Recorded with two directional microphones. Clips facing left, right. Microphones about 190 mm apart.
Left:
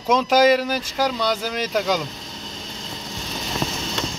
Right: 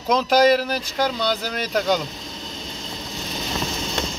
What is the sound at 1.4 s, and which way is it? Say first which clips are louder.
Speech: left 1 dB; 5° left (ahead or behind).